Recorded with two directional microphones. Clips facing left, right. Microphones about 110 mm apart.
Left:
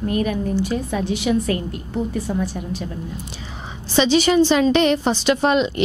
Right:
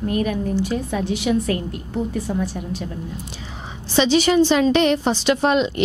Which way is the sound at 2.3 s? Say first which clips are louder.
Even; 20° left (ahead or behind).